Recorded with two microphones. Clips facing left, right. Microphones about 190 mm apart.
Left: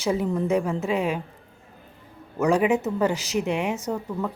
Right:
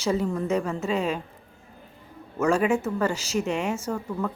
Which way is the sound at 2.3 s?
15° left (ahead or behind).